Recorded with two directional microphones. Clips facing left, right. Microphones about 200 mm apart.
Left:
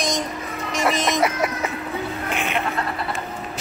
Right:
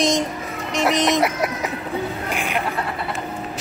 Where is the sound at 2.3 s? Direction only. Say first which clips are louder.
Left 1 dB; 10° right (ahead or behind).